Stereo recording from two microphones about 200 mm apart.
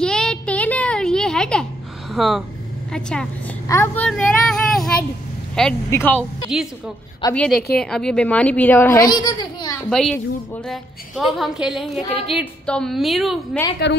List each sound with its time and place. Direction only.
0.0 s a sound: 5° left (ahead or behind)
2.1 s a woman's voice: centre (ahead or behind)
3.6 s child singing: 10° left (ahead or behind)
5.9 s a woman's voice: 10° left (ahead or behind)
7.7 s a woman's voice: 5° left (ahead or behind); by 9.8 s 20° left (ahead or behind)
9.8 s a woman's voice: 5° left (ahead or behind)
13.8 s a woman's voice: 55° left (ahead or behind)